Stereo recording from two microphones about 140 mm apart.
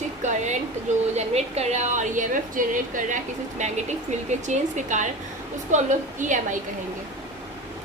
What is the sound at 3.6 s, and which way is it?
A woman's voice, 55° right (ahead or behind).